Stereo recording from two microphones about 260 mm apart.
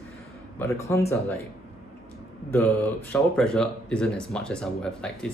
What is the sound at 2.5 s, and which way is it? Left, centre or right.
Speech, centre.